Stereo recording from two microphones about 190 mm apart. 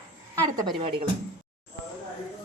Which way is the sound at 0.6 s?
25° right (ahead or behind).